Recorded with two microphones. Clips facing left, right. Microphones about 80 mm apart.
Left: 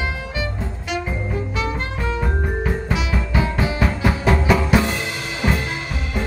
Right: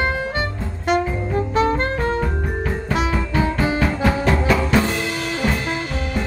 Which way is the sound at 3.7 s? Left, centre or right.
Centre.